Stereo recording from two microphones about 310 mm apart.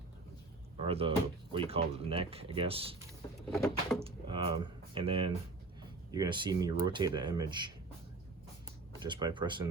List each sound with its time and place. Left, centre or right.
0.9 s speech: centre
3.5 s a sound: centre
4.0 s speech: centre
9.0 s speech: centre